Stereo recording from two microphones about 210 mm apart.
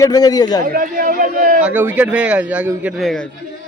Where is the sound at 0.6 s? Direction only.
40° right (ahead or behind).